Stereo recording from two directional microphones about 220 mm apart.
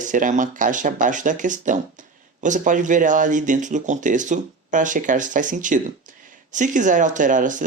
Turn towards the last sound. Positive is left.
turn(degrees=-35)  # may be behind; listen again after turning